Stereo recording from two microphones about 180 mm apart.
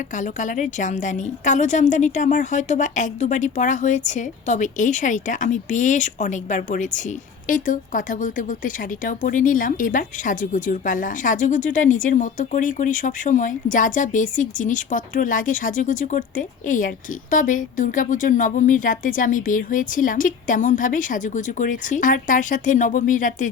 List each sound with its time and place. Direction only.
0.1 s a woman's voice: 45° left (ahead or behind)